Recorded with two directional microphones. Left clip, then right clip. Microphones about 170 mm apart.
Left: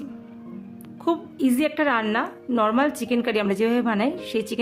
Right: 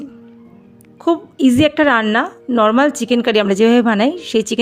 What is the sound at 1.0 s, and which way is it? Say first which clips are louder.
A woman's voice: right 8 dB; 40° right (ahead or behind).